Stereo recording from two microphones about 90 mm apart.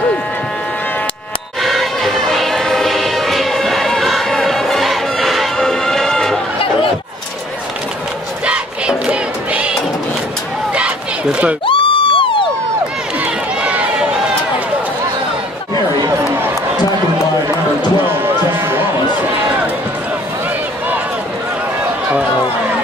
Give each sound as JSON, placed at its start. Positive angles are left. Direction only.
{"t": 1.6, "sound": "music", "side_deg": 0}
{"t": 8.5, "sound": "battle cry", "side_deg": -10}
{"t": 11.6, "sound": "crowd", "side_deg": 70}
{"t": 13.2, "sound": "run", "side_deg": -15}
{"t": 18.2, "sound": "music", "side_deg": -25}